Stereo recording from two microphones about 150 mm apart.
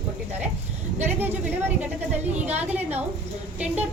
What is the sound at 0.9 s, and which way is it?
Speech, 15° right (ahead or behind).